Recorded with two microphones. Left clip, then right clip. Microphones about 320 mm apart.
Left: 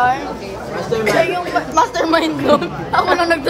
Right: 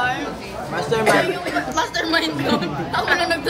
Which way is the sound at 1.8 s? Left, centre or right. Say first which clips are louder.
Left 7 dB; centre.